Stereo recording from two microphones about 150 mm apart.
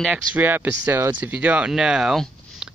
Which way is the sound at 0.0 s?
10° right (ahead or behind).